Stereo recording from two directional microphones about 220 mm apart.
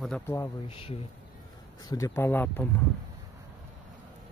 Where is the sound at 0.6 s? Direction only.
25° left (ahead or behind); by 2.7 s 10° left (ahead or behind).